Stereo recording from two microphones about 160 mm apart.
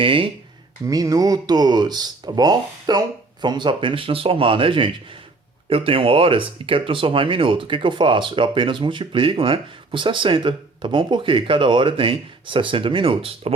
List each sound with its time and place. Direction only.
0.0 s speech: 35° right (ahead or behind)
0.9 s speech: 20° right (ahead or behind)